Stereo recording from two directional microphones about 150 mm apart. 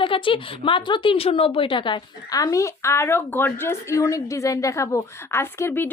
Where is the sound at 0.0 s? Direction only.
35° left (ahead or behind).